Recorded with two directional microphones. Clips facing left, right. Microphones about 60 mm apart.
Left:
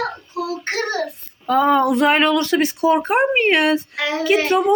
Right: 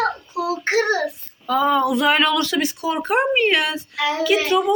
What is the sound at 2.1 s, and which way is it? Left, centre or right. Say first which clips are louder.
Speech: left 2 dB; left.